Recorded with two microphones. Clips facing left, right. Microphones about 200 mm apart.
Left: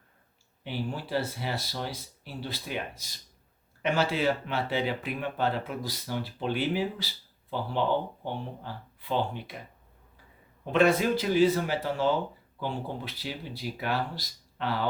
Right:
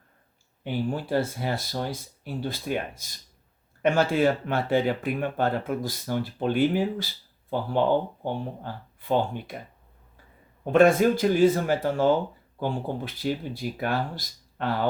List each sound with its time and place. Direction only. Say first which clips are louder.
0.6 s speech: right 6 dB; 50° right (ahead or behind)
8.2 s speech: right 5 dB; 50° right (ahead or behind)
10.7 s speech: right 5 dB; 45° right (ahead or behind)